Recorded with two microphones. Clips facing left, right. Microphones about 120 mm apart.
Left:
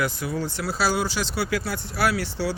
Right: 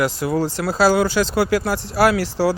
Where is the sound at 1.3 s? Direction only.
45° right (ahead or behind).